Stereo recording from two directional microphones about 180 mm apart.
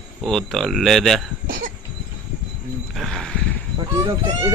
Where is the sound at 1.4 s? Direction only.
50° right (ahead or behind).